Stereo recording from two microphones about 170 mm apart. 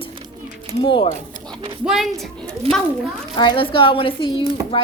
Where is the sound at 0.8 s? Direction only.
30° left (ahead or behind).